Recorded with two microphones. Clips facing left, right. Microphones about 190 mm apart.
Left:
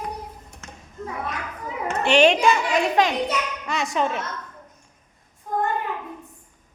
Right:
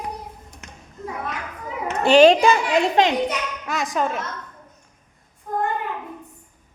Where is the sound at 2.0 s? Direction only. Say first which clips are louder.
Right 4 dB; 35° right (ahead or behind).